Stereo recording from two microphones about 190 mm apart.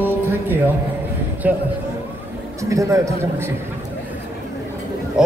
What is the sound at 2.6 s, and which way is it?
Music, 15° right (ahead or behind).